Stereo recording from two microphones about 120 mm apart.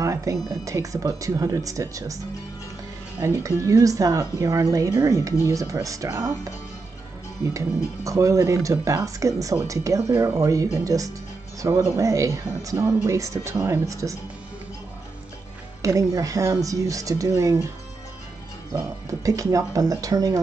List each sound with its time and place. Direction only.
0.0 s music: 25° right (ahead or behind)
0.7 s speech: 25° right (ahead or behind)
3.2 s speech: 25° right (ahead or behind)
15.8 s speech: 25° right (ahead or behind)
18.7 s speech: 25° right (ahead or behind)